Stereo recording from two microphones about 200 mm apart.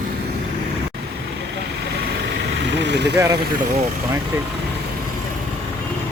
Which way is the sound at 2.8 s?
60° right (ahead or behind).